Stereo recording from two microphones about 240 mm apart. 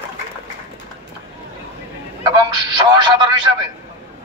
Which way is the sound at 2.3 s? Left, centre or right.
Centre.